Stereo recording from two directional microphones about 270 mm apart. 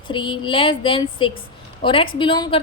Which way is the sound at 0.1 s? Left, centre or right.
Centre.